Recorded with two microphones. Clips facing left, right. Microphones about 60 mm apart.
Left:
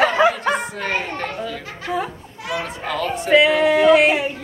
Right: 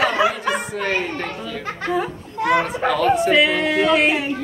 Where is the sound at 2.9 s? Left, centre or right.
Centre.